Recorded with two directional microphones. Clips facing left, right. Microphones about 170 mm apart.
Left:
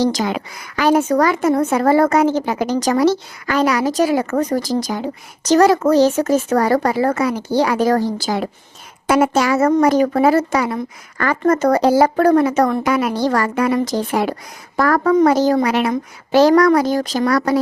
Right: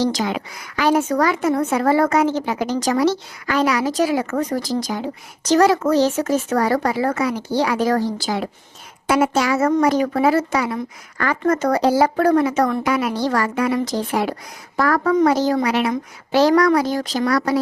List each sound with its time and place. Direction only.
0.0 s a woman's voice: 45° left (ahead or behind)